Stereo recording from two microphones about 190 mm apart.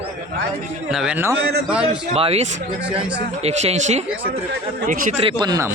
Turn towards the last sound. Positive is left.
turn(degrees=-20)  # may be behind; listen again after turning